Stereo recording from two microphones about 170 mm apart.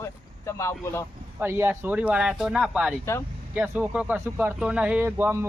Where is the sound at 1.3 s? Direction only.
15° right (ahead or behind).